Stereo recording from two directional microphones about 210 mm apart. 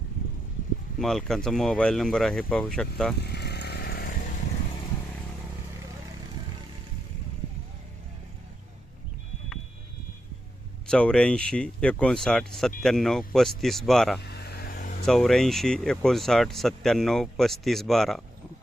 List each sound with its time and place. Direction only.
0.9 s speech: centre (ahead or behind)
3.2 s chainsaw: 50° left (ahead or behind)
10.8 s speech: 5° left (ahead or behind)
14.3 s vehicle: 50° left (ahead or behind)
15.0 s speech: centre (ahead or behind)